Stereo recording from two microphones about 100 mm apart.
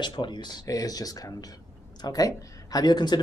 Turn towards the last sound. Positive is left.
turn(degrees=45)  # may be behind; listen again after turning